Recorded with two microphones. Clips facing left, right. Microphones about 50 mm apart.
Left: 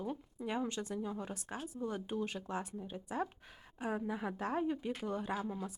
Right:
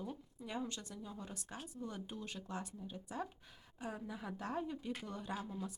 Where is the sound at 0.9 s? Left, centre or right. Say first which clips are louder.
Left 9 dB; left.